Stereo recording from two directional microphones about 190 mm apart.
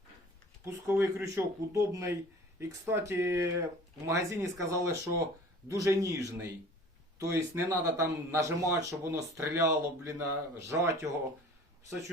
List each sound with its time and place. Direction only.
0.6 s a man's voice: 15° right (ahead or behind)